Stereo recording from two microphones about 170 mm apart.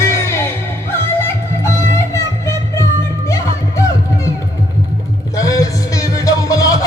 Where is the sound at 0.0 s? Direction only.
15° left (ahead or behind).